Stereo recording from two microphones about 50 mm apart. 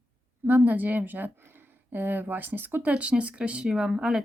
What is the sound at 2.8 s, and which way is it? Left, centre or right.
Speech, right.